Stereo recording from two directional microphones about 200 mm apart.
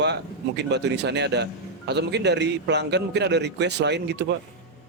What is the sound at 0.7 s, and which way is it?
A man's voice, 60° right (ahead or behind).